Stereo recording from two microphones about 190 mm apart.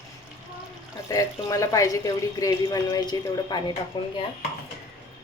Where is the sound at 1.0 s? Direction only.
15° left (ahead or behind).